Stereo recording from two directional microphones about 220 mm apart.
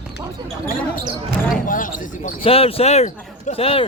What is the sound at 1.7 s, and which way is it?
Speech, 40° left (ahead or behind).